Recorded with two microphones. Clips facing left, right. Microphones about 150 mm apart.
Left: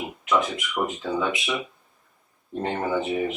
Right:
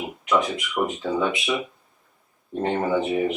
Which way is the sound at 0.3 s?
Centre (ahead or behind).